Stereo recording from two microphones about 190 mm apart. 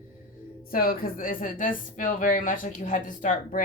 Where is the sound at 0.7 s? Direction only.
50° left (ahead or behind).